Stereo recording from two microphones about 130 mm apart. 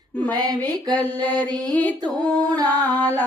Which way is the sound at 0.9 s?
15° left (ahead or behind).